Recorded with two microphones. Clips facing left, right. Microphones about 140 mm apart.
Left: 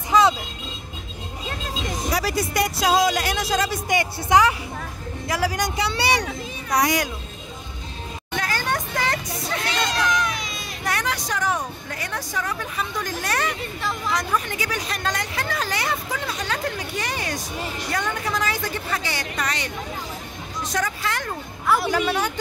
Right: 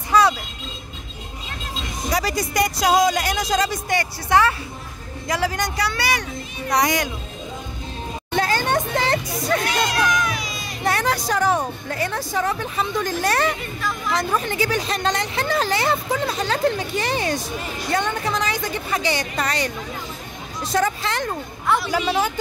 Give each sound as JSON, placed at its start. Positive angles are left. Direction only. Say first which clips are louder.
{"t": 0.1, "sound": "music", "louder": "even", "side_deg": 20}
{"t": 2.1, "sound": "speech", "louder": "right 2 dB", "side_deg": 5}
{"t": 3.9, "sound": "speech", "louder": "left 1 dB", "side_deg": 15}
{"t": 5.8, "sound": "speech", "louder": "left 2 dB", "side_deg": 25}
{"t": 6.7, "sound": "speech", "louder": "right 1 dB", "side_deg": 5}
{"t": 8.4, "sound": "a sound", "louder": "right 5 dB", "side_deg": -25}
{"t": 9.8, "sound": "a sound", "louder": "right 2 dB", "side_deg": -5}
{"t": 10.8, "sound": "a woman's voice", "louder": "right 5 dB", "side_deg": -30}
{"t": 19.4, "sound": "a woman's voice", "louder": "right 3 dB", "side_deg": -40}
{"t": 20.7, "sound": "speech", "louder": "right 5 dB", "side_deg": -25}
{"t": 21.7, "sound": "speech", "louder": "even", "side_deg": 5}